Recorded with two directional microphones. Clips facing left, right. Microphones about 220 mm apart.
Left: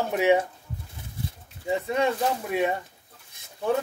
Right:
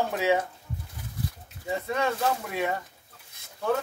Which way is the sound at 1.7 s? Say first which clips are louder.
Left 3 dB; 20° left (ahead or behind).